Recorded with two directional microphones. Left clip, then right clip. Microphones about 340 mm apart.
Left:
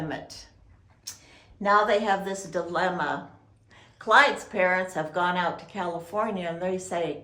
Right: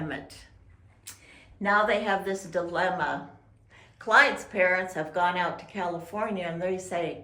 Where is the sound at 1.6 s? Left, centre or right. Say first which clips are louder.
Left 2 dB; left.